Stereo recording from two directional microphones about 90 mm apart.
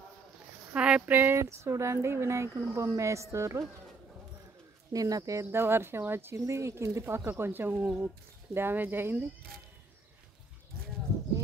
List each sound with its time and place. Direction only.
0.7 s speech: 10° right (ahead or behind); by 3.6 s 35° right (ahead or behind)
4.9 s speech: 40° right (ahead or behind); by 9.2 s 20° right (ahead or behind)